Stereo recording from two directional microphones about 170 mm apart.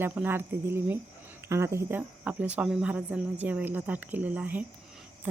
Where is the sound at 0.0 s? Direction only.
10° right (ahead or behind).